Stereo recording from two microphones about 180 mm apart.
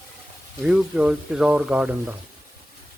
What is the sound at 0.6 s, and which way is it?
Speech, 5° right (ahead or behind).